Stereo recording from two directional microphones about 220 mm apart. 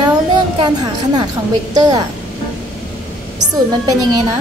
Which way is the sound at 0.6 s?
20° right (ahead or behind).